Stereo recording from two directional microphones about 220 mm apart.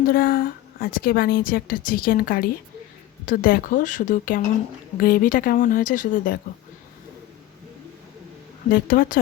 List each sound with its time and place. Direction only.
0.0 s a woman's voice: 40° left (ahead or behind)
8.7 s a woman's voice: 40° left (ahead or behind)